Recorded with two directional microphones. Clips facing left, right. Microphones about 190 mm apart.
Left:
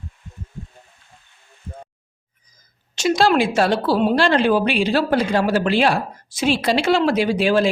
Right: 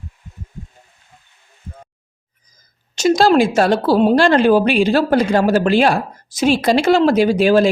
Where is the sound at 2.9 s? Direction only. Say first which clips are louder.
Right 4 dB; 40° right (ahead or behind).